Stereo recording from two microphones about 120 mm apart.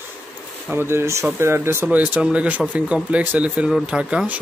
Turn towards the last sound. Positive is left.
turn(degrees=-10)  # may be behind; listen again after turning